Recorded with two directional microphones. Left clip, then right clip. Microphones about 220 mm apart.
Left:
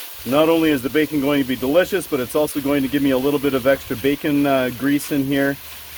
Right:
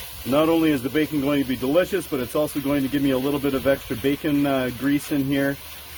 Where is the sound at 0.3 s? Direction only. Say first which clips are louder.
Left 4 dB; 35° left (ahead or behind).